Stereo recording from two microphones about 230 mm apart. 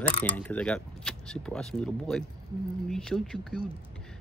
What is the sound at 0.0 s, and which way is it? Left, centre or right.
Speech, centre.